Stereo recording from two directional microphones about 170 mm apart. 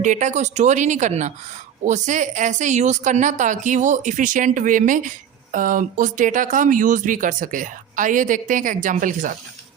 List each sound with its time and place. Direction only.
0.0 s speech: 45° right (ahead or behind)